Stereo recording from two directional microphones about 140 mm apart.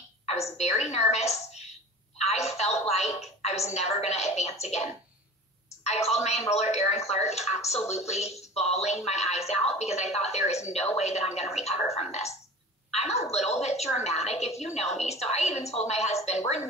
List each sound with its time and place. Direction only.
0.2 s a woman's voice: 50° left (ahead or behind)
2.1 s a woman's voice: 50° left (ahead or behind)
5.9 s a woman's voice: 50° left (ahead or behind)
12.9 s a sound: 50° left (ahead or behind)
13.3 s a woman's voice: 50° left (ahead or behind)